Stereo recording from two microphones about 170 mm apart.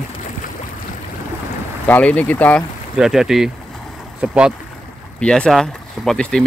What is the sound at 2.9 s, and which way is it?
Speech, 5° right (ahead or behind).